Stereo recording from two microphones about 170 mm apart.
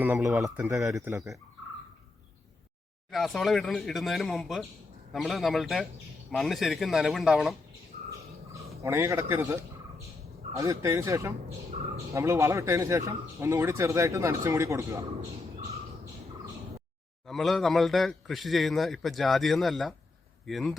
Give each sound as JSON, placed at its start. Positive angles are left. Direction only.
{"t": 0.0, "sound": "speech", "side_deg": -10}
{"t": 3.1, "sound": "a man's voice", "side_deg": 0}
{"t": 8.8, "sound": "speech", "side_deg": -15}
{"t": 17.2, "sound": "a man's voice", "side_deg": 0}